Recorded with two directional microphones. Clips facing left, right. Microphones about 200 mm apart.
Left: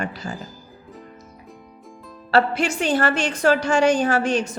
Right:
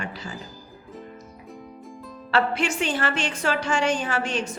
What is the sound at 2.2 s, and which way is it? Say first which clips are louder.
A woman's voice: left 4 dB; 40° left (ahead or behind).